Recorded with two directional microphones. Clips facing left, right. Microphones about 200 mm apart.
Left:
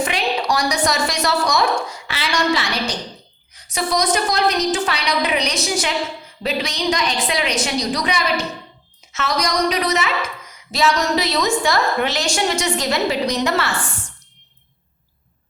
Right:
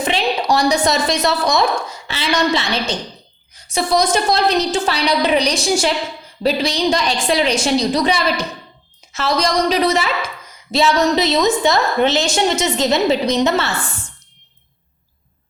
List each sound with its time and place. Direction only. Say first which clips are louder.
0.0 s a woman's voice: right 2 dB; 25° right (ahead or behind)